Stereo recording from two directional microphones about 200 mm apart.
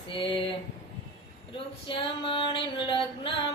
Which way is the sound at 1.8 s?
25° left (ahead or behind).